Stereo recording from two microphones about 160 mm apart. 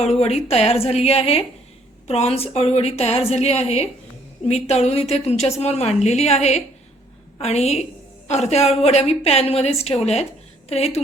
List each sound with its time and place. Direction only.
0.0 s a woman's voice: 40° left (ahead or behind)